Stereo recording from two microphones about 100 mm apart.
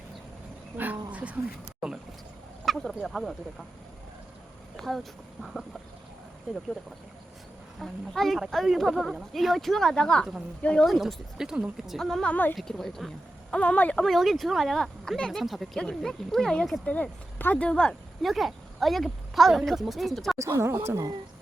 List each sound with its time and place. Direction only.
1.1 s a sound: 15° right (ahead or behind)
2.6 s speech: centre (ahead or behind)
4.8 s speech: centre (ahead or behind)
7.8 s speech: centre (ahead or behind)
12.3 s speech: 20° left (ahead or behind)
12.5 s speech: 5° left (ahead or behind)
13.6 s speech: 15° left (ahead or behind)
14.0 s speech: centre (ahead or behind)
20.4 s speech: 25° right (ahead or behind)